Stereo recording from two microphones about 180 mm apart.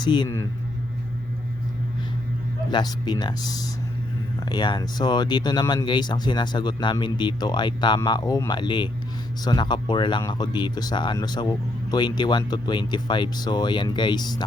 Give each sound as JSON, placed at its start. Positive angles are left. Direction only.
{"t": 0.0, "sound": "speech", "side_deg": 25}
{"t": 2.6, "sound": "speech", "side_deg": 25}
{"t": 4.4, "sound": "speech", "side_deg": 25}